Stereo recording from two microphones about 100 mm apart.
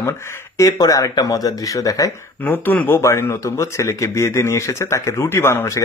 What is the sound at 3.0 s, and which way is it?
Speech, 30° left (ahead or behind).